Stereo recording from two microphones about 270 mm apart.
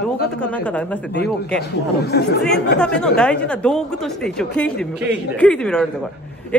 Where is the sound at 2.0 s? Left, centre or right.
Left.